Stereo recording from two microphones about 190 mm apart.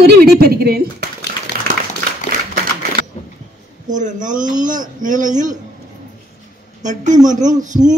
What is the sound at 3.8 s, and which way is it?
A woman's voice, 40° right (ahead or behind).